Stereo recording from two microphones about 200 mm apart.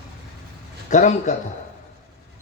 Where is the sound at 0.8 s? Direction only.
40° left (ahead or behind).